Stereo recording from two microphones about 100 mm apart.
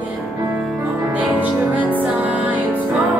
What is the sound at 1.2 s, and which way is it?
Music, 15° right (ahead or behind).